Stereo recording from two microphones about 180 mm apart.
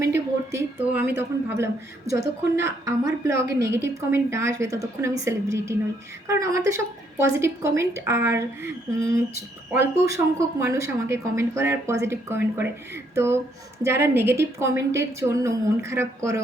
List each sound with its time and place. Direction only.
0.0 s a woman's voice: 15° right (ahead or behind)